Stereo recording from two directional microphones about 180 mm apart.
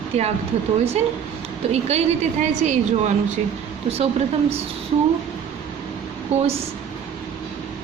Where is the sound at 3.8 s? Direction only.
35° right (ahead or behind).